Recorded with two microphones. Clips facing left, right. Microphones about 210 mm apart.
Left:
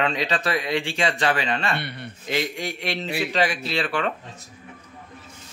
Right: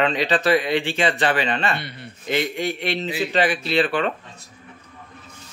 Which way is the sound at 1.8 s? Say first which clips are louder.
Left 2 dB; 60° left (ahead or behind).